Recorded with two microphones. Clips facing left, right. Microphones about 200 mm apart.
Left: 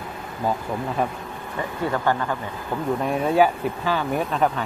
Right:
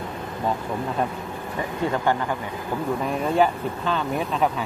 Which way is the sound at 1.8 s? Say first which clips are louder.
Even; 15° right (ahead or behind).